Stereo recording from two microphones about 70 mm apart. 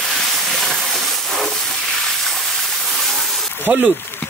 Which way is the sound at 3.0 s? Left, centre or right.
Centre.